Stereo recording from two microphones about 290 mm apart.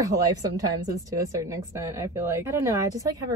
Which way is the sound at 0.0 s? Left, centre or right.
Centre.